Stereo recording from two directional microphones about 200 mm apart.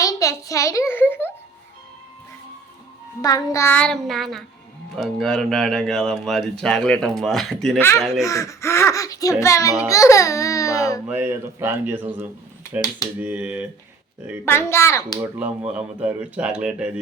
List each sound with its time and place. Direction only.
0.0 s a sound: 15° left (ahead or behind)
3.2 s speech: 20° left (ahead or behind)
11.1 s speech: 10° right (ahead or behind)
13.1 s speech: 10° right (ahead or behind)
14.4 s speech: 10° left (ahead or behind)
15.2 s speech: 5° right (ahead or behind)